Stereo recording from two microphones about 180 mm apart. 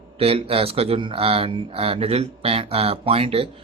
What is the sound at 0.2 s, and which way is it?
Speech, 35° right (ahead or behind).